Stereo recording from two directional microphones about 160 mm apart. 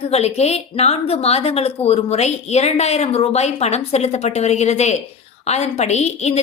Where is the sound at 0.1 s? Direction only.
40° left (ahead or behind).